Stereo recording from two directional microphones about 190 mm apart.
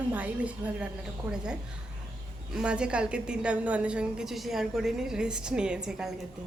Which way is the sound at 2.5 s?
5° right (ahead or behind).